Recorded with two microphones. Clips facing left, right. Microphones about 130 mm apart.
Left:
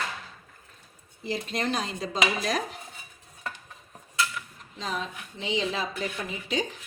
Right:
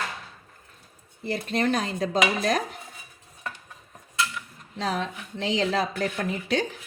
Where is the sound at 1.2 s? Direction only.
55° right (ahead or behind).